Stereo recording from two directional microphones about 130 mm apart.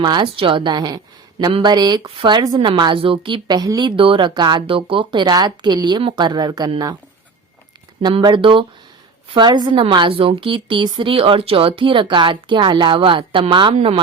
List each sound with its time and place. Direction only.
0.0 s a woman's voice: 40° right (ahead or behind)
8.0 s a woman's voice: 35° right (ahead or behind)